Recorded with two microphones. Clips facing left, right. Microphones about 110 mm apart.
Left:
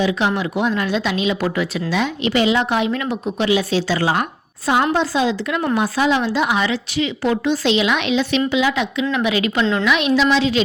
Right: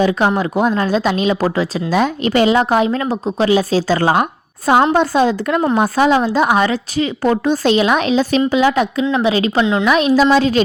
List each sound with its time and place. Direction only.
0.0 s a woman's voice: 45° right (ahead or behind)
9.1 s a woman's voice: 30° right (ahead or behind); by 10.6 s 45° right (ahead or behind)